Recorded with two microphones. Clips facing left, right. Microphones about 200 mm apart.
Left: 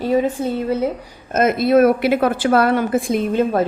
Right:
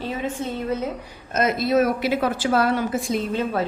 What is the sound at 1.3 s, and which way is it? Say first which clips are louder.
A woman's voice: left 6 dB; 50° left (ahead or behind).